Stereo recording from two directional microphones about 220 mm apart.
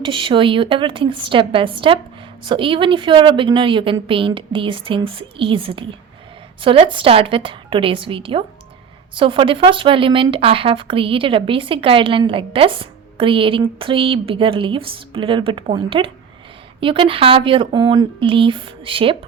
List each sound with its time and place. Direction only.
0.0 s speech: 25° right (ahead or behind)